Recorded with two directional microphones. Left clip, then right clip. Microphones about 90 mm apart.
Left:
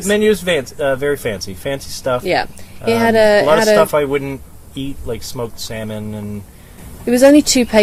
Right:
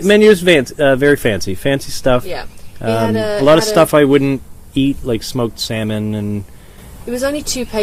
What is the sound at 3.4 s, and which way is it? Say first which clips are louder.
Speech: right 1 dB; 35° right (ahead or behind).